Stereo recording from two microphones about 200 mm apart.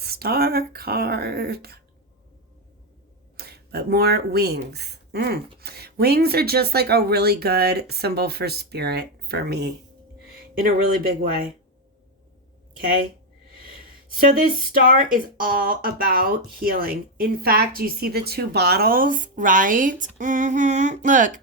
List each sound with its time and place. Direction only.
0.0 s a sound: 50° right (ahead or behind)
3.3 s speech: 50° right (ahead or behind)
14.1 s speech: 45° right (ahead or behind)
15.4 s speech: 45° right (ahead or behind)